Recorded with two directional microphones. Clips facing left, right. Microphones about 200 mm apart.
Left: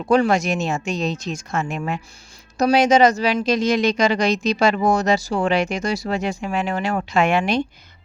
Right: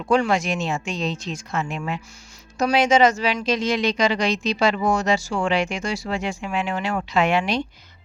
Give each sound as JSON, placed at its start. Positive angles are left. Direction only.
{"t": 0.1, "sound": "speech", "side_deg": 40}